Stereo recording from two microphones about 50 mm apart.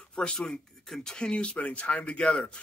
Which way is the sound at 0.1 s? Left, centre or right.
Centre.